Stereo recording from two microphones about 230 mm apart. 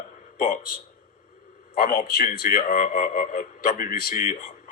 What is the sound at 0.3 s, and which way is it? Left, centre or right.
A man's voice, left.